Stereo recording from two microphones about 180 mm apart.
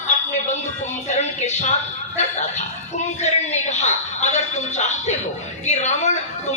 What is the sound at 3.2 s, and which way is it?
A woman's voice, 40° left (ahead or behind).